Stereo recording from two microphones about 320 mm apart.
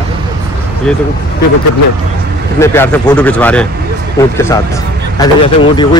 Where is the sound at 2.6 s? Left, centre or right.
Centre.